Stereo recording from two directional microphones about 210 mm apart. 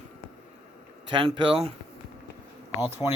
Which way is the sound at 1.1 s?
25° right (ahead or behind).